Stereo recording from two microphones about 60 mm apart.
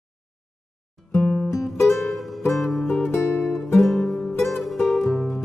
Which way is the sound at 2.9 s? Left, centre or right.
Left.